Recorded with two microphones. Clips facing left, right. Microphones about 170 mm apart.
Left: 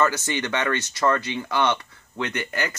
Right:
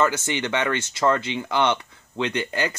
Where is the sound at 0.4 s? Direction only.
15° right (ahead or behind).